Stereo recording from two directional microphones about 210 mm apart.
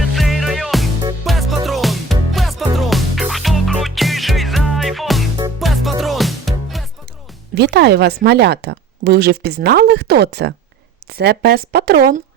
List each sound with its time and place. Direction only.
0.1 s music: centre (ahead or behind)
7.5 s speech: 55° right (ahead or behind)